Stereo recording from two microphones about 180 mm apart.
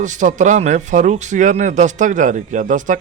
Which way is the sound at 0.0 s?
45° right (ahead or behind).